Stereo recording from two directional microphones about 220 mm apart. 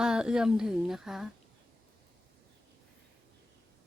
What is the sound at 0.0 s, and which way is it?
Speech, 5° right (ahead or behind).